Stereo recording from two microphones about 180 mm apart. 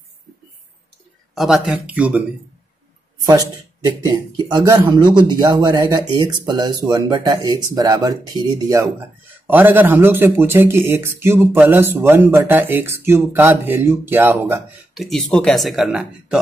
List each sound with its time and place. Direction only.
1.3 s speech: centre (ahead or behind)
3.3 s speech: 20° right (ahead or behind)
15.0 s speech: centre (ahead or behind)